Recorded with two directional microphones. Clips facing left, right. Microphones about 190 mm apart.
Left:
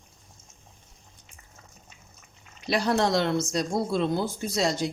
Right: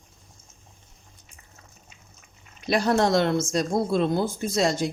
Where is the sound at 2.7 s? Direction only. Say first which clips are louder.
Right 3 dB; 50° right (ahead or behind).